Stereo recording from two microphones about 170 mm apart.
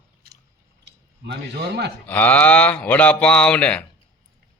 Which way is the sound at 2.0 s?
10° left (ahead or behind).